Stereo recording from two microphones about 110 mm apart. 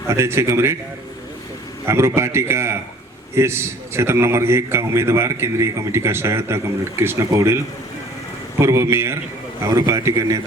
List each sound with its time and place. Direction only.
0.1 s a man's voice: 25° right (ahead or behind)
1.9 s a man's voice: 25° right (ahead or behind)